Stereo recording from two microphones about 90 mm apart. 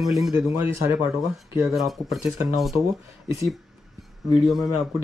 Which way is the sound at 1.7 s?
Centre (ahead or behind).